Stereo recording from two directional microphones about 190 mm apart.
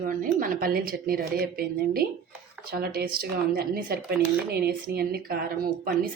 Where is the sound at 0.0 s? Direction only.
45° right (ahead or behind).